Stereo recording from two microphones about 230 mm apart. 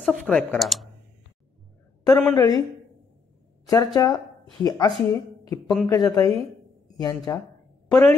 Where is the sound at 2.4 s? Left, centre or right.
Centre.